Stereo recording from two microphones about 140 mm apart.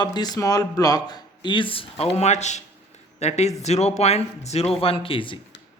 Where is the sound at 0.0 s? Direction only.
30° left (ahead or behind).